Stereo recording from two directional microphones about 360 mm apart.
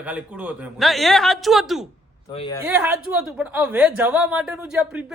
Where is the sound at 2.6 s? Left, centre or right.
Centre.